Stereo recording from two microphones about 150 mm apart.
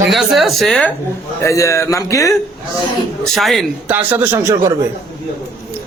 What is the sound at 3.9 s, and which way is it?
Speech, 10° right (ahead or behind).